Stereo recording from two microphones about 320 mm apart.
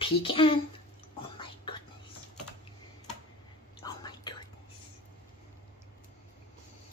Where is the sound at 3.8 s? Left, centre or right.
Centre.